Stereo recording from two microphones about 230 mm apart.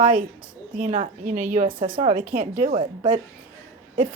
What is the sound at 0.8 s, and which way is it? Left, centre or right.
A woman's voice, right.